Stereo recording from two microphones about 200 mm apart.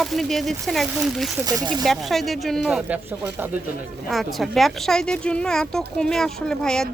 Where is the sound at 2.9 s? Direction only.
10° right (ahead or behind).